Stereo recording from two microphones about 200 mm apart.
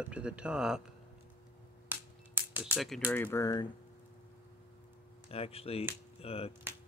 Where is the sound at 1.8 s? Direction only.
10° right (ahead or behind).